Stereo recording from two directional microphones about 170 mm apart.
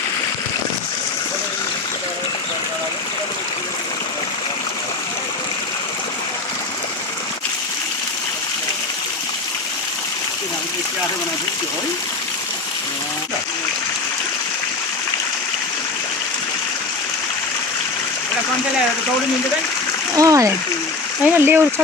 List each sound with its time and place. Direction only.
20.1 s speech: 20° right (ahead or behind)